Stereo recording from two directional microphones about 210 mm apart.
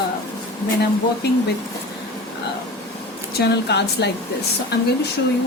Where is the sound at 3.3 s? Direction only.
55° left (ahead or behind).